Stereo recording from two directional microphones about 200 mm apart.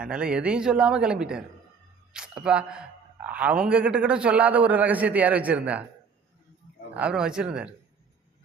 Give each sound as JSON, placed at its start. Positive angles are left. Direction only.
{"t": 0.0, "sound": "speech", "side_deg": -5}
{"t": 6.9, "sound": "speech", "side_deg": -5}